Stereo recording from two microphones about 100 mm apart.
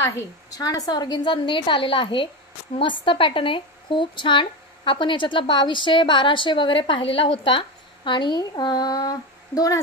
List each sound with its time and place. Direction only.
0.5 s a woman's voice: 40° left (ahead or behind)